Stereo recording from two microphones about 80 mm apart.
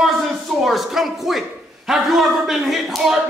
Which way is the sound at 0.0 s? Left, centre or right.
Centre.